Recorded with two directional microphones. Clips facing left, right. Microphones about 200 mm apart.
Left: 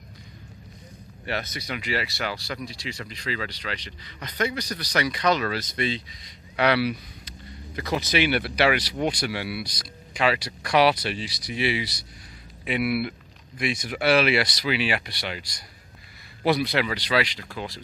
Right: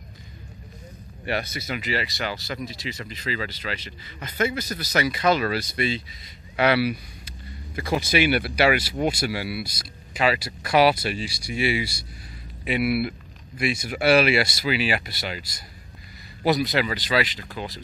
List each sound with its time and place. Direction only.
1.2 s speech: 10° right (ahead or behind)